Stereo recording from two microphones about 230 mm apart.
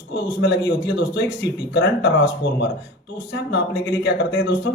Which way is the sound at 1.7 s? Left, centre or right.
Left.